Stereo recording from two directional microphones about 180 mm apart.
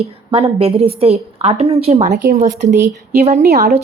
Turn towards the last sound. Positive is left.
turn(degrees=-60)  # may be behind; listen again after turning